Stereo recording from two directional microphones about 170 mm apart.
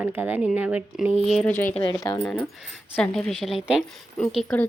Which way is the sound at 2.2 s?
10° left (ahead or behind).